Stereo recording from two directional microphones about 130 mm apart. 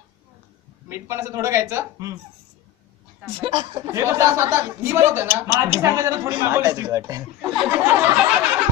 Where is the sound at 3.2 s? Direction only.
40° right (ahead or behind).